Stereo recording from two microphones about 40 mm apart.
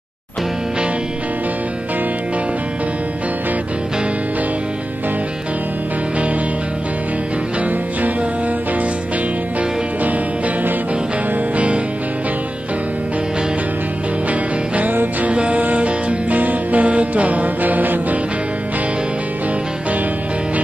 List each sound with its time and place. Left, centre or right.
11.5 s music: right
15.2 s music: right